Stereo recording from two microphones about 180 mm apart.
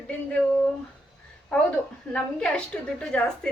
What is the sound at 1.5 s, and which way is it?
A woman's voice, 5° left (ahead or behind).